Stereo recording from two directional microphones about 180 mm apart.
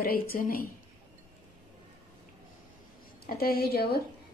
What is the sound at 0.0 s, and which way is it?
Speech, 55° left (ahead or behind).